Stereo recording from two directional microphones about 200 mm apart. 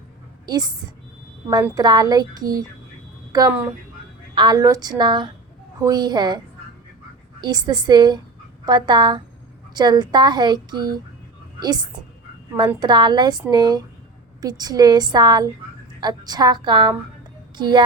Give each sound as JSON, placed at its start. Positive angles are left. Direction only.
{"t": 0.4, "sound": "a woman's voice", "side_deg": -20}
{"t": 4.4, "sound": "speech", "side_deg": -20}
{"t": 7.4, "sound": "speech", "side_deg": -20}